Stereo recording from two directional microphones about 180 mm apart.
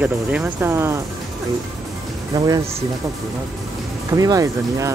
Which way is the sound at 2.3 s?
20° right (ahead or behind).